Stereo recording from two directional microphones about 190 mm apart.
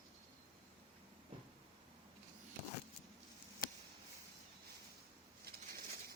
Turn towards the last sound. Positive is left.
turn(degrees=-55)  # may be behind; listen again after turning